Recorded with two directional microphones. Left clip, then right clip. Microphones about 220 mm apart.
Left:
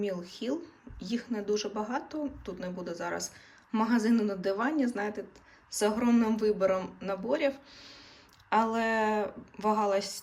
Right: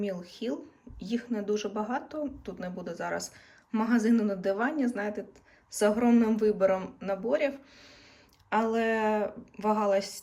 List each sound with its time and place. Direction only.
0.0 s speech: 5° left (ahead or behind)